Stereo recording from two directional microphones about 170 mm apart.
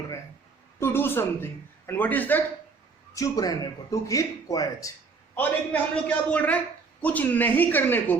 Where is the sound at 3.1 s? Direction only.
20° left (ahead or behind).